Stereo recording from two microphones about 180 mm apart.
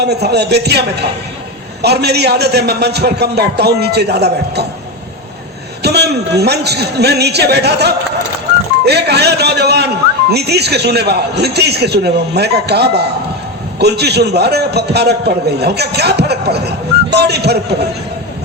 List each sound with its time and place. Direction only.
0.0 s a man's voice: 65° right (ahead or behind)
5.8 s a man's voice: 65° right (ahead or behind)